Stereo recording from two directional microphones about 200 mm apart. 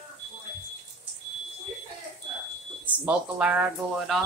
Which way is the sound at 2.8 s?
5° right (ahead or behind).